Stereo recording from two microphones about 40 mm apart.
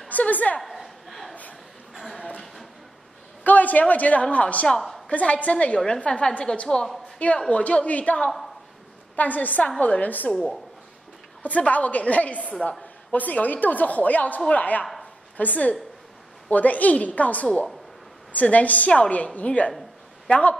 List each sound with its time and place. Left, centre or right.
0.1 s a woman's voice: left
0.6 s chuckle: centre
2.3 s a sound: centre
3.4 s a woman's voice: left
10.3 s speech: centre
11.4 s a woman's voice: left